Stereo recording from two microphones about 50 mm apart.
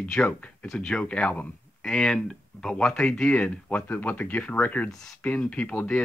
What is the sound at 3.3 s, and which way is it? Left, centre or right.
Speech, left.